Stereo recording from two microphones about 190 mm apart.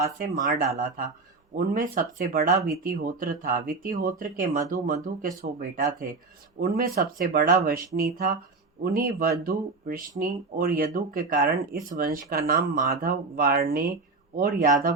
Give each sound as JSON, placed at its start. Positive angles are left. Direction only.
{"t": 0.2, "sound": "speech", "side_deg": -45}
{"t": 1.5, "sound": "speech", "side_deg": -45}